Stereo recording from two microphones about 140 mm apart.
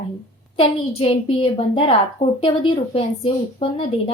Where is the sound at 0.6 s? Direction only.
40° left (ahead or behind).